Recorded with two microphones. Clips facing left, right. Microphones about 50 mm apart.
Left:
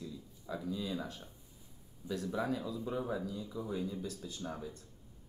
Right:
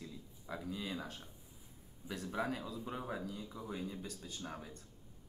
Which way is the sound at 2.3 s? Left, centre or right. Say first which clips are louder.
Left 1 dB; right.